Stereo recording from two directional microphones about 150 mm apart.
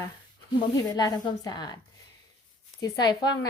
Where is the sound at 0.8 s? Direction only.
25° left (ahead or behind).